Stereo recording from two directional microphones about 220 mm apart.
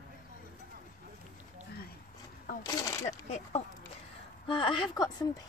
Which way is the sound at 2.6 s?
15° left (ahead or behind).